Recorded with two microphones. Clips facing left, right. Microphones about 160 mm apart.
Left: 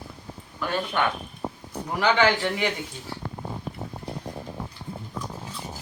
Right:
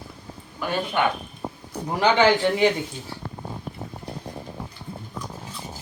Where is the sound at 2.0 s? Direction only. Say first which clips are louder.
Right 3 dB; 25° right (ahead or behind).